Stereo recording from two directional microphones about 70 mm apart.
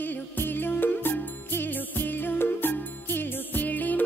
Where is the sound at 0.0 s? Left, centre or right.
Left.